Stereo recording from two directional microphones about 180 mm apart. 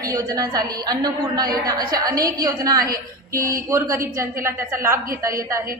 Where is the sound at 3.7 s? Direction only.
15° right (ahead or behind).